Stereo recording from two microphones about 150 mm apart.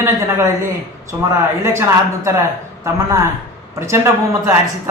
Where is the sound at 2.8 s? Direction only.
20° right (ahead or behind).